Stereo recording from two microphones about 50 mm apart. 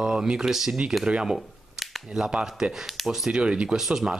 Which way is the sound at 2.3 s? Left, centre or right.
Centre.